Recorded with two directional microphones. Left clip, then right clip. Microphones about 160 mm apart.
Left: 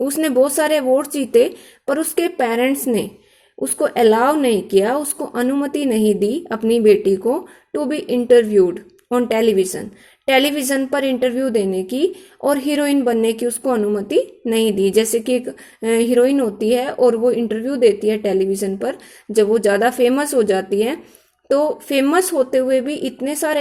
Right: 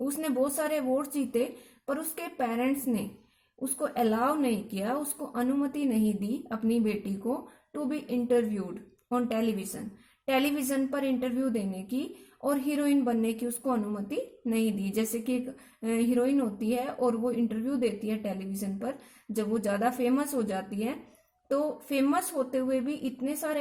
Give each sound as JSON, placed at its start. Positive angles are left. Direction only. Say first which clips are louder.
{"t": 0.0, "sound": "a woman's voice", "louder": "left 14 dB", "side_deg": 25}